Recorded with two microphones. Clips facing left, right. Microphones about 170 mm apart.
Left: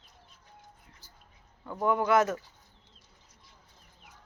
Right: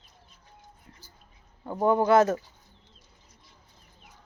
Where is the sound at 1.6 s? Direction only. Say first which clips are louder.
Right 5 dB; 30° right (ahead or behind).